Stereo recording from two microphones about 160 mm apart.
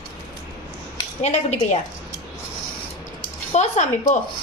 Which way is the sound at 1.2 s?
45° left (ahead or behind).